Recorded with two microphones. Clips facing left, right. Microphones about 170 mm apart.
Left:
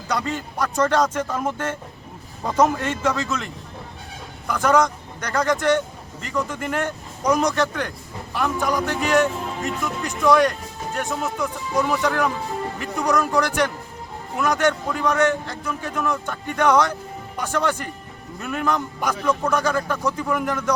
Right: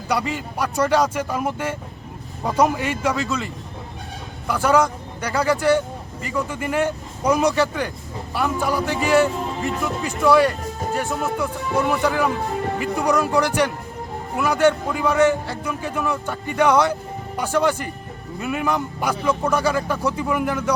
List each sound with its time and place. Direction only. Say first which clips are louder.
0.1 s a man's voice: right 2 dB; 10° right (ahead or behind)